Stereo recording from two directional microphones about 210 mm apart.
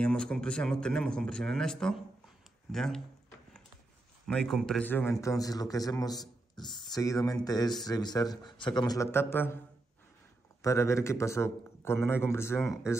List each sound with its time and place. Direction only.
0.0 s speech: 5° left (ahead or behind)
4.3 s a man's voice: centre (ahead or behind)
10.6 s a man's voice: 15° left (ahead or behind)